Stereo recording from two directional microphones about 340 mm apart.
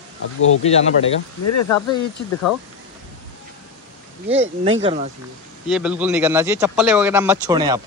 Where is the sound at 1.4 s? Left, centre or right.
Left.